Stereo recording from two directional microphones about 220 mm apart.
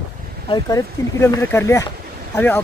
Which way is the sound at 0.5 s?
15° left (ahead or behind).